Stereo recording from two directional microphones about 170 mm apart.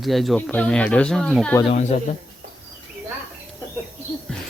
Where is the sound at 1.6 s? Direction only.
40° left (ahead or behind).